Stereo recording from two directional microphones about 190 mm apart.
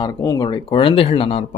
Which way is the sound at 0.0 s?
20° left (ahead or behind).